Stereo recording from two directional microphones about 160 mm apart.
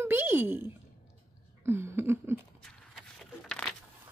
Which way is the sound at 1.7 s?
15° right (ahead or behind).